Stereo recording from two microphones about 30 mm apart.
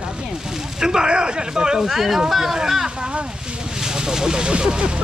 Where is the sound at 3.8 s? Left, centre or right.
Right.